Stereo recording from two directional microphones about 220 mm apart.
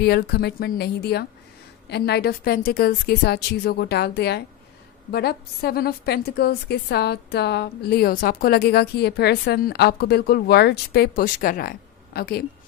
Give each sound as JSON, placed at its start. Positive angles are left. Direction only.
{"t": 0.0, "sound": "a woman's voice", "side_deg": 45}